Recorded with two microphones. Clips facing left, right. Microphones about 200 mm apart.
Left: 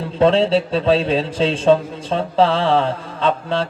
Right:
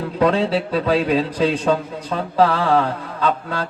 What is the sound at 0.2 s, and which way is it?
A man's voice, 25° left (ahead or behind).